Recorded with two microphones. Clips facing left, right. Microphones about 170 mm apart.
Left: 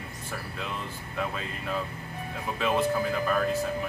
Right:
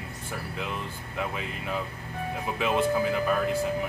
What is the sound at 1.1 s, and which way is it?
Speech, 15° right (ahead or behind).